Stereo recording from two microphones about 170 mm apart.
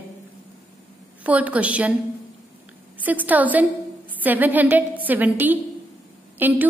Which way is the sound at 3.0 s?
10° right (ahead or behind).